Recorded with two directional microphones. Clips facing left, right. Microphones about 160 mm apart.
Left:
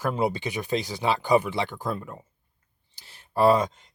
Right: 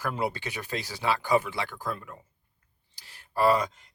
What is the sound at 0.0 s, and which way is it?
Speech, 20° left (ahead or behind).